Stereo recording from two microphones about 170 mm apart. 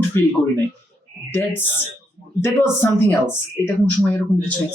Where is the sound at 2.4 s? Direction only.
15° left (ahead or behind).